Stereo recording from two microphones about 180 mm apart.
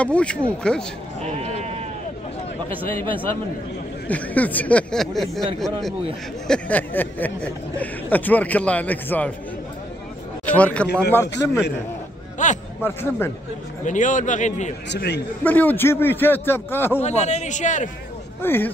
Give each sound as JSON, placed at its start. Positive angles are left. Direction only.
{"t": 0.0, "sound": "speech", "side_deg": 5}
{"t": 1.2, "sound": "sheep", "side_deg": -35}
{"t": 4.1, "sound": "speech", "side_deg": 10}
{"t": 10.4, "sound": "speech", "side_deg": 5}
{"t": 12.4, "sound": "a man's voice", "side_deg": 45}
{"t": 12.8, "sound": "speech", "side_deg": 15}
{"t": 13.8, "sound": "a man's voice", "side_deg": 45}
{"t": 14.9, "sound": "a man's voice", "side_deg": 70}
{"t": 15.4, "sound": "speech", "side_deg": 10}
{"t": 17.0, "sound": "a man's voice", "side_deg": 40}
{"t": 18.4, "sound": "speech", "side_deg": 10}